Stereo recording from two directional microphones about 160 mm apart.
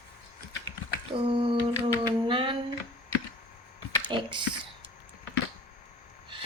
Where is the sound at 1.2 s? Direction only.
35° right (ahead or behind).